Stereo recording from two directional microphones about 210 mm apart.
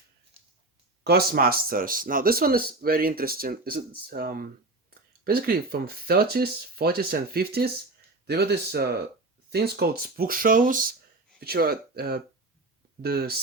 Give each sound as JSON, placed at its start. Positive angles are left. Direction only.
{"t": 1.0, "sound": "speech", "side_deg": -50}